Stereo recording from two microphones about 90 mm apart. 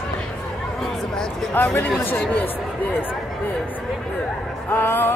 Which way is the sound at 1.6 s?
20° left (ahead or behind).